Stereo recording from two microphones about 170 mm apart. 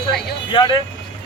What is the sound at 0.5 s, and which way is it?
Speech, 30° left (ahead or behind).